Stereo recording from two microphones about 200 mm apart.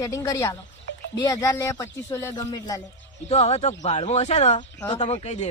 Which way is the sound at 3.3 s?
30° left (ahead or behind).